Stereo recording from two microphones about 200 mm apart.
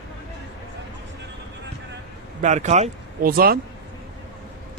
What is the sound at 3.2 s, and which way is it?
Speech, 45° right (ahead or behind).